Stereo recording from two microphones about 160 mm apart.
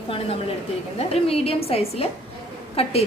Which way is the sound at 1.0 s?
40° left (ahead or behind).